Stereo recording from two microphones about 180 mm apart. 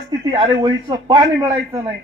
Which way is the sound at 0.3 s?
25° right (ahead or behind).